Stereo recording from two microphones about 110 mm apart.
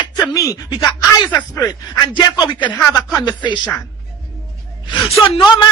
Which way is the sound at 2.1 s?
45° left (ahead or behind).